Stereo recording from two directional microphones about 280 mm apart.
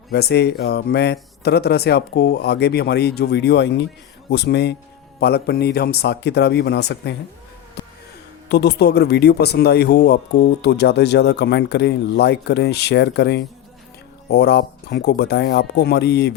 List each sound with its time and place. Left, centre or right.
0.1 s speech: left
8.4 s speech: left